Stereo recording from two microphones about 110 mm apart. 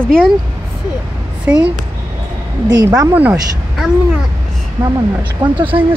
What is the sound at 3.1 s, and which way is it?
Speech, 15° right (ahead or behind).